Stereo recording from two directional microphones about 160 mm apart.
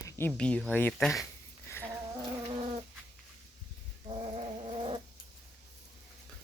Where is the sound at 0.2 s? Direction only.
10° left (ahead or behind).